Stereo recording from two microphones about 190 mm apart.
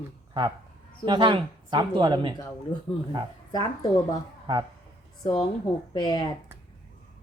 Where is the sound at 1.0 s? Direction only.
25° right (ahead or behind).